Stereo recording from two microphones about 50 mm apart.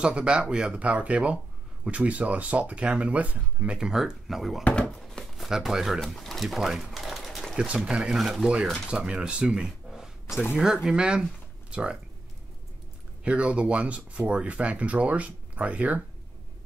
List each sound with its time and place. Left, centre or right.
0.0 s speech: right
0.8 s speech: right
3.7 s speech: centre
4.6 s speech: left
5.2 s a sound: centre
5.5 s speech: centre
6.1 s a sound: centre
7.5 s speech: right
8.1 s speech: centre
8.8 s speech: centre
13.2 s speech: right